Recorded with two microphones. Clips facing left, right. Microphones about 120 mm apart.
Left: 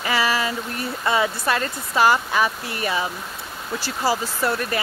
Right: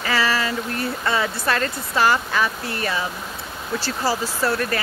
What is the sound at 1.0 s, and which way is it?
Speech, 15° left (ahead or behind).